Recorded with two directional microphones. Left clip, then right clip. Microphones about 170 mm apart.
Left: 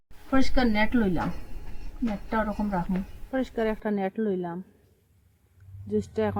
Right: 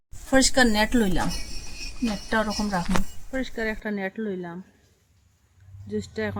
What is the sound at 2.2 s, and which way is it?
Speech, 20° right (ahead or behind).